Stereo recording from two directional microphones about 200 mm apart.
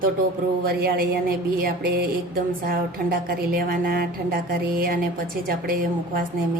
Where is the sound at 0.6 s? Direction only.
50° right (ahead or behind).